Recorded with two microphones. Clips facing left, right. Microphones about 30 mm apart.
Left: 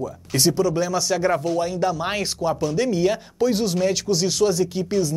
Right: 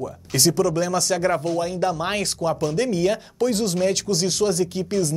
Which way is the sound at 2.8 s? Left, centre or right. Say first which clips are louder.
Left 2 dB; right.